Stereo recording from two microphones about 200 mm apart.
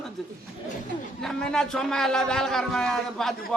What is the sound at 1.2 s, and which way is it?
A man's voice, 5° left (ahead or behind).